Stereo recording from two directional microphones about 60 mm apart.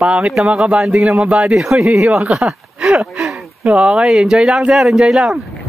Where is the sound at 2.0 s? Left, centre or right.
Right.